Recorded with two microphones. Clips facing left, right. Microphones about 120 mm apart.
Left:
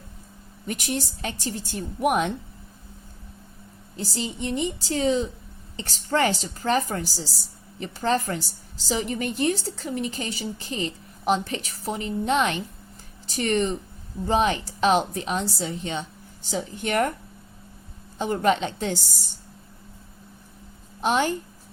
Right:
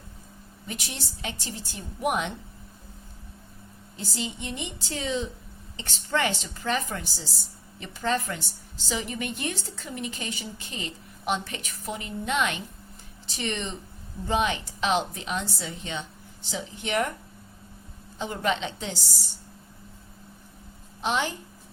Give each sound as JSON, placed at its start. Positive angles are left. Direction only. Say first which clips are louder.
{"t": 0.7, "sound": "a woman's voice", "louder": "left 9 dB", "side_deg": 45}
{"t": 3.9, "sound": "a woman's voice", "louder": "left 4 dB", "side_deg": 35}
{"t": 13.2, "sound": "a woman's voice", "louder": "left 8 dB", "side_deg": 45}
{"t": 18.2, "sound": "a woman's voice", "louder": "left 6 dB", "side_deg": 45}
{"t": 21.0, "sound": "a woman's voice", "louder": "left 5 dB", "side_deg": 45}